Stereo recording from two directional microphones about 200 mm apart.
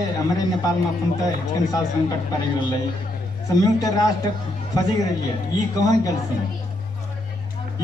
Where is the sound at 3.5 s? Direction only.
20° left (ahead or behind).